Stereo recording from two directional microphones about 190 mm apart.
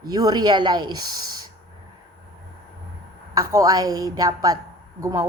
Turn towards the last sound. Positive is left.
turn(degrees=-15)  # may be behind; listen again after turning